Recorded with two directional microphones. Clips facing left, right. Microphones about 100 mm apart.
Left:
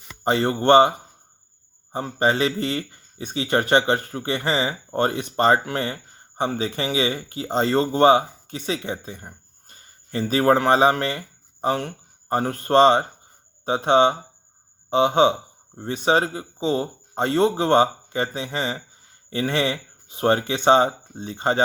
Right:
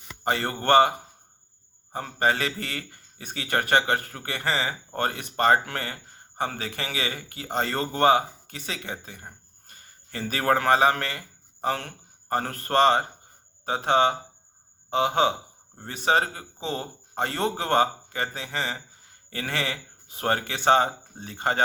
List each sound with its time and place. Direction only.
0.3 s a man's voice: 25° left (ahead or behind)